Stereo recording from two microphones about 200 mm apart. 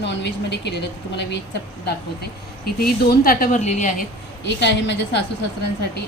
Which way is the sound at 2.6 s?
50° left (ahead or behind).